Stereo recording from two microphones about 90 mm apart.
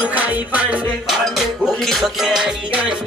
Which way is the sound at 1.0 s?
5° right (ahead or behind).